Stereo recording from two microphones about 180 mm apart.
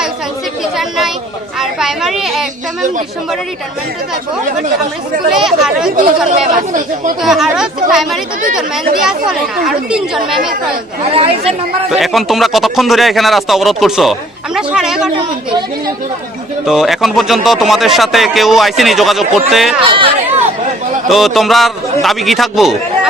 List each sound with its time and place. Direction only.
0.8 s a sound: centre (ahead or behind)
1.5 s a child's voice: centre (ahead or behind)
5.3 s speech: 5° right (ahead or behind)
6.3 s speech: 45° right (ahead or behind)
7.2 s speech: centre (ahead or behind)
11.1 s speech: 30° right (ahead or behind)
11.9 s speech: centre (ahead or behind)
16.6 s speech: centre (ahead or behind)
19.8 s speech: 30° right (ahead or behind)
21.1 s speech: centre (ahead or behind)